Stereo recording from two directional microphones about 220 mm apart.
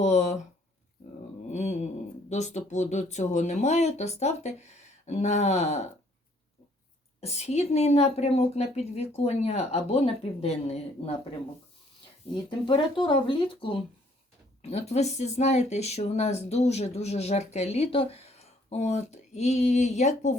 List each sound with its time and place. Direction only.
0.0 s a sound: 30° left (ahead or behind)
1.5 s mantra: 30° left (ahead or behind)
2.3 s speech: 30° left (ahead or behind)
7.2 s speech: 30° left (ahead or behind)
12.3 s speech: 20° left (ahead or behind)